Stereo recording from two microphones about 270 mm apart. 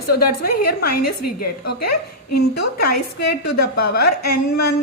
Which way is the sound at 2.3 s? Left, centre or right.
Left.